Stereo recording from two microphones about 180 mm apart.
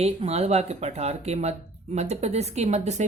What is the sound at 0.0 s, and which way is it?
Speech, 35° right (ahead or behind).